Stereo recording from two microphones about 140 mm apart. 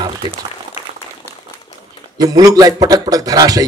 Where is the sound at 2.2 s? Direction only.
25° right (ahead or behind).